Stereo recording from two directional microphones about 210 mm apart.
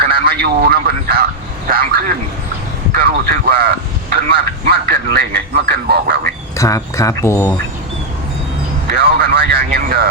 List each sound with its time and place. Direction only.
0.0 s a man's voice: 45° right (ahead or behind)
6.6 s speech: 15° left (ahead or behind)
8.9 s a man's voice: 45° right (ahead or behind)